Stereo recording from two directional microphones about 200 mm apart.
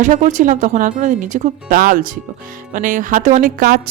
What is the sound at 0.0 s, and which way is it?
Speech, 40° right (ahead or behind).